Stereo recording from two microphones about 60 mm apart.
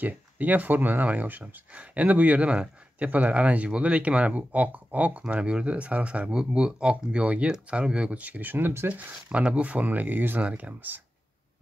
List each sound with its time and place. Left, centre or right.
0.0 s speech: right